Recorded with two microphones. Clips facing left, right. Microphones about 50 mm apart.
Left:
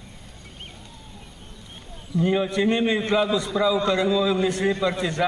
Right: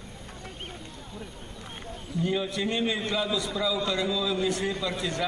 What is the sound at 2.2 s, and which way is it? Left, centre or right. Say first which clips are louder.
A man's voice: left 7 dB; left.